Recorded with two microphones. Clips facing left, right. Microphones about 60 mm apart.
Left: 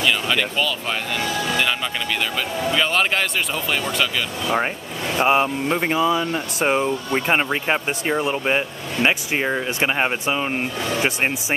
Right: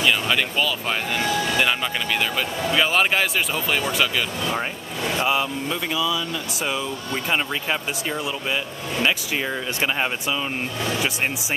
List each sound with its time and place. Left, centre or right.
0.0 s speech: centre
5.2 s speech: left